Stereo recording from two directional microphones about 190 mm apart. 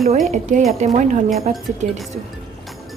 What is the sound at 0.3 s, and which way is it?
Speech, 40° right (ahead or behind).